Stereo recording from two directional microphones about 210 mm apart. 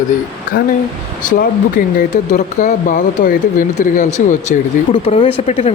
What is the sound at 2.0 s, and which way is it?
Speech, 35° left (ahead or behind).